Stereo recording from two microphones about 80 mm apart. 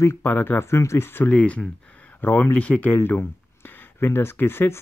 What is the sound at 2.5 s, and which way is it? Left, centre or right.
Speech, centre.